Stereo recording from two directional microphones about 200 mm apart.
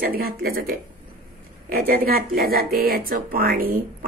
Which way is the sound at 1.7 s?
45° right (ahead or behind).